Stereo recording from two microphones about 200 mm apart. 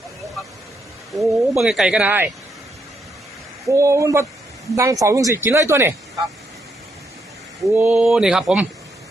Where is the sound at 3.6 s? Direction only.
15° right (ahead or behind).